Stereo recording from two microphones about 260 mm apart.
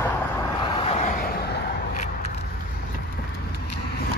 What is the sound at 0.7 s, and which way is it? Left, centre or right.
Vehicle, left.